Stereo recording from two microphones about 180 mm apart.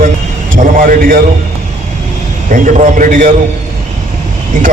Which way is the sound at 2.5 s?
45° right (ahead or behind).